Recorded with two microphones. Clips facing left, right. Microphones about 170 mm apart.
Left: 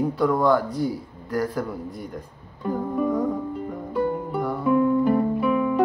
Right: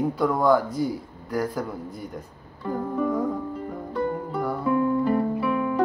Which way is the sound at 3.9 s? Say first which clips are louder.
Left 3 dB; 10° left (ahead or behind).